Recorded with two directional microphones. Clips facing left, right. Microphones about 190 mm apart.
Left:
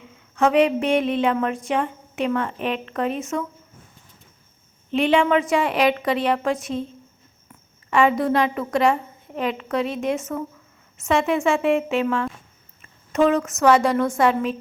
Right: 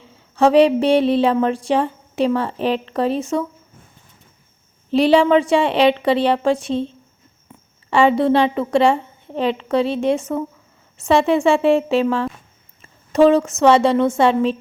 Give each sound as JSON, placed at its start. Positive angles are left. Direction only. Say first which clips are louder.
{"t": 0.0, "sound": "speech", "louder": "right 5 dB", "side_deg": -30}
{"t": 4.9, "sound": "a woman's voice", "louder": "right 5 dB", "side_deg": -35}